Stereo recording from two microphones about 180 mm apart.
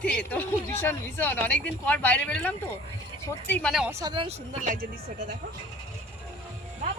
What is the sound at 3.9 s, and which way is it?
Speech, 15° right (ahead or behind).